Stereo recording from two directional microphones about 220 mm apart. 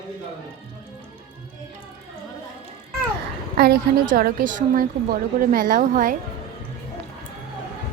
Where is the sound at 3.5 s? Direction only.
45° right (ahead or behind).